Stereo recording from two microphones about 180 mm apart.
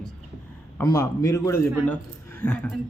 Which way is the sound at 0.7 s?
20° left (ahead or behind).